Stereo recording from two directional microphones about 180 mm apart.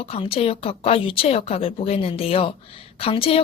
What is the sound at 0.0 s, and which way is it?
A woman's voice, 30° left (ahead or behind).